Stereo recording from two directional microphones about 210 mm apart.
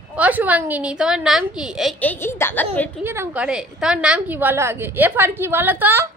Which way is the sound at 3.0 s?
10° right (ahead or behind).